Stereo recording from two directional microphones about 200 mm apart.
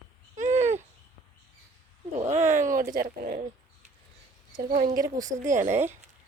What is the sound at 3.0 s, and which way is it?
Speech, 40° right (ahead or behind).